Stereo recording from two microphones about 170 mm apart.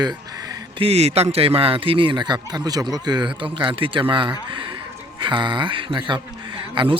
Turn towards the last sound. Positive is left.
turn(degrees=-30)  # may be behind; listen again after turning